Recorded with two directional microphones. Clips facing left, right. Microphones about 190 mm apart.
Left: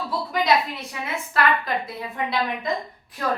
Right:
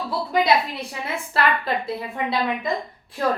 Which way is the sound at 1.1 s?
30° right (ahead or behind).